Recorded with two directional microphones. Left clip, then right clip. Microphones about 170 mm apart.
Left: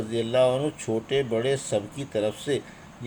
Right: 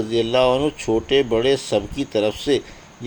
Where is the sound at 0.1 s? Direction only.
30° right (ahead or behind).